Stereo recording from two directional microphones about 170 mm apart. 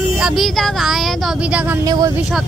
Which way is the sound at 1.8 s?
20° right (ahead or behind).